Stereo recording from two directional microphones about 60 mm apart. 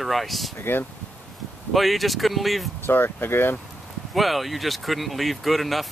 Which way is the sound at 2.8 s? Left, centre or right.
Left.